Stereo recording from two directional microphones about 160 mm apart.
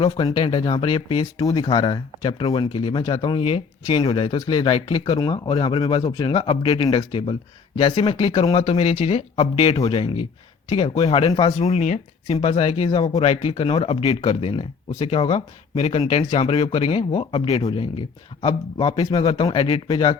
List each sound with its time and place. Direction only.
0.0 s a man's voice: 30° left (ahead or behind)
11.5 s a man's voice: 45° left (ahead or behind); by 20.1 s 25° left (ahead or behind)